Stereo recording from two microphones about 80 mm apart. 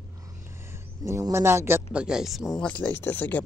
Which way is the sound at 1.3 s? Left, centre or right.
Right.